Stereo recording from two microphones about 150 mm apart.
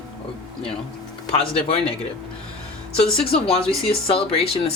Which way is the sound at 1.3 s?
40° left (ahead or behind).